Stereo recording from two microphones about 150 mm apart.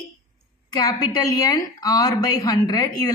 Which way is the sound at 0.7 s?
25° left (ahead or behind).